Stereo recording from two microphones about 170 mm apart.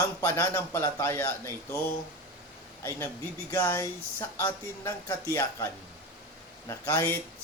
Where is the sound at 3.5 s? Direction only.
15° left (ahead or behind).